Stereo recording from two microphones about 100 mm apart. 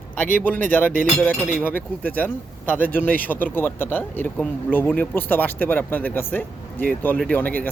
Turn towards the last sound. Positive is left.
turn(degrees=15)  # may be behind; listen again after turning